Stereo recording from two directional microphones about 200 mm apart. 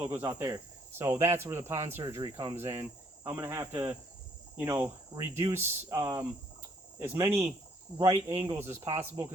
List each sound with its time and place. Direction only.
0.0 s speech: 10° right (ahead or behind)
8.5 s speech: 15° right (ahead or behind)